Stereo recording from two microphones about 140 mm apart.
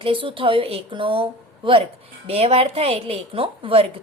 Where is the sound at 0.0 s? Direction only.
40° right (ahead or behind).